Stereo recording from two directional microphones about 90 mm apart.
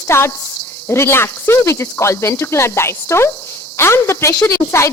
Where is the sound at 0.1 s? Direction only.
30° left (ahead or behind).